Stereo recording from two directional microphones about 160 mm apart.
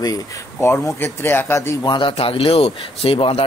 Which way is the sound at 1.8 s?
30° left (ahead or behind).